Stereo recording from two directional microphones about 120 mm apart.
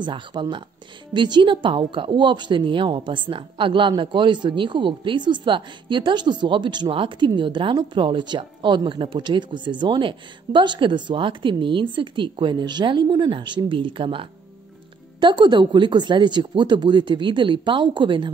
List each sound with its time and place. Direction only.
0.0 s a woman's voice: 40° right (ahead or behind)